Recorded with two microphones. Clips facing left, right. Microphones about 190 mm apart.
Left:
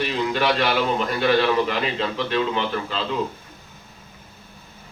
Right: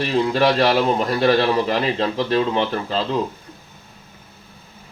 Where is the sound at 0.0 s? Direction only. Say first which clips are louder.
Right 5 dB; 35° right (ahead or behind).